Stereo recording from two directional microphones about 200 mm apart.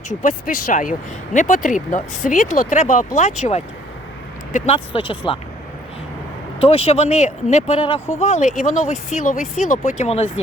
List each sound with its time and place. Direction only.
0.1 s speech: 40° left (ahead or behind)
4.5 s speech: 30° left (ahead or behind)
6.6 s speech: 30° left (ahead or behind)